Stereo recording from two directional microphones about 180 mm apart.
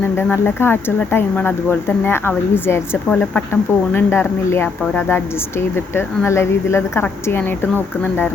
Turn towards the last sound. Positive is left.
turn(degrees=10)  # may be behind; listen again after turning